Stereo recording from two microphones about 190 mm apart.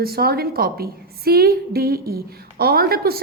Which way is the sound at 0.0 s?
55° right (ahead or behind).